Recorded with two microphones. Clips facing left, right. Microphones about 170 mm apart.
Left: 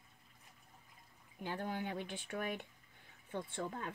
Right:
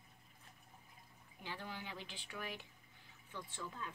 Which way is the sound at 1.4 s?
50° left (ahead or behind).